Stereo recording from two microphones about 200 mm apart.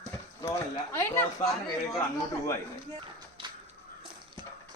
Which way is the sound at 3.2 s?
20° right (ahead or behind).